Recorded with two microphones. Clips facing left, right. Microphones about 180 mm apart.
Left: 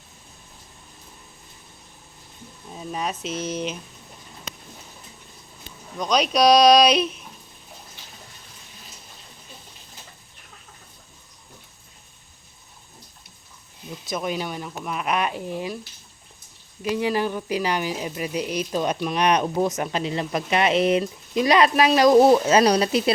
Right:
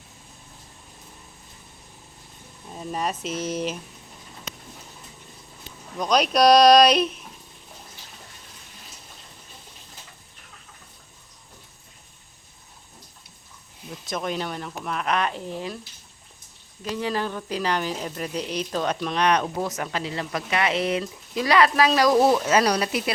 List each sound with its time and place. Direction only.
2.7 s speech: centre (ahead or behind)
6.0 s speech: centre (ahead or behind)
14.1 s speech: 5° left (ahead or behind)
16.8 s speech: 15° left (ahead or behind)